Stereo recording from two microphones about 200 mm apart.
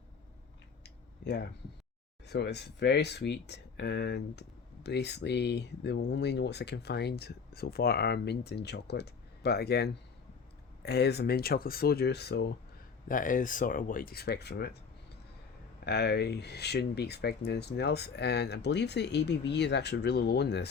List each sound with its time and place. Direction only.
1.2 s speech: 55° left (ahead or behind)
13.1 s speech: 40° left (ahead or behind)
15.8 s speech: 55° left (ahead or behind)